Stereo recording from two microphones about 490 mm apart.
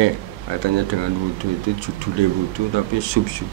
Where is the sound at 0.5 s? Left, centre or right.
Right.